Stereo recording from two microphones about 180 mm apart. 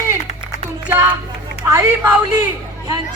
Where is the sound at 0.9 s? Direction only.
10° right (ahead or behind).